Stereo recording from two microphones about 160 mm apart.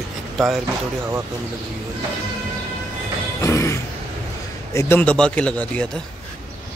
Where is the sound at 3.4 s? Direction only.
15° left (ahead or behind).